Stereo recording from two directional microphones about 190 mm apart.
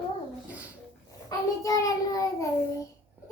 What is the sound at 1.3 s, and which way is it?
A child's voice, 20° left (ahead or behind).